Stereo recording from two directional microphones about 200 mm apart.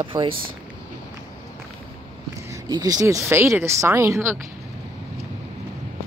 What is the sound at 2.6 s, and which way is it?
Speech, 20° right (ahead or behind).